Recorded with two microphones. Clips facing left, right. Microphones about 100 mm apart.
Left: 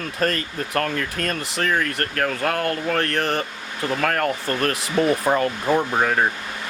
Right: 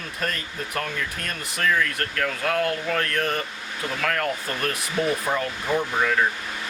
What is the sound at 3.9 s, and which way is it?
Speech, 40° left (ahead or behind).